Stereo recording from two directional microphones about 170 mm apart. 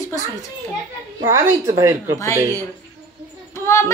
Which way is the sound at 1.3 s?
15° right (ahead or behind).